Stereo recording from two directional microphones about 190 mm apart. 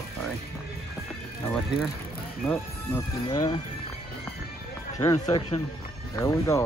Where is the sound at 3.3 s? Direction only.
20° left (ahead or behind).